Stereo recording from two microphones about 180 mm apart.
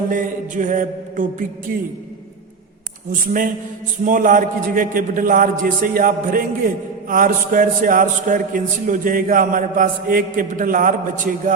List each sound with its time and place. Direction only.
0.1 s a man's voice: 45° right (ahead or behind)
3.1 s a man's voice: 50° right (ahead or behind)